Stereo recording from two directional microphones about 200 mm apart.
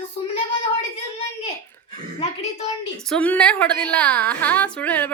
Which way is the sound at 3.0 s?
5° left (ahead or behind).